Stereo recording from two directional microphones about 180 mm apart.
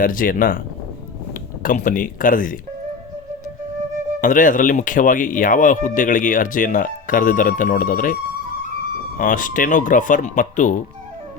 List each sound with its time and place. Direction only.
0.0 s speech: 50° left (ahead or behind)
1.6 s speech: 45° left (ahead or behind)
4.2 s speech: 45° left (ahead or behind)
9.1 s speech: 45° left (ahead or behind)